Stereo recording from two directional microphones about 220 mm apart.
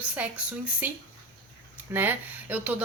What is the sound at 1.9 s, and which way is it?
Speech, 10° right (ahead or behind).